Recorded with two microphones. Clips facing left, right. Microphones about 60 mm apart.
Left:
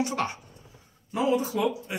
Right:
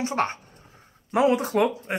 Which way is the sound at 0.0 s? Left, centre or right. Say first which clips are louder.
Right 3 dB; right.